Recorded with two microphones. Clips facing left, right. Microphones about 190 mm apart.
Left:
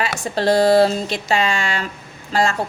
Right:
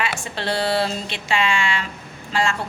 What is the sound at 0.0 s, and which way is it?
A woman's voice, 40° left (ahead or behind).